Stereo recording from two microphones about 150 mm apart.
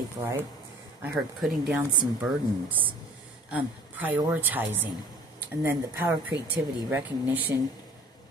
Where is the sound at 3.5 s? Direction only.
10° right (ahead or behind).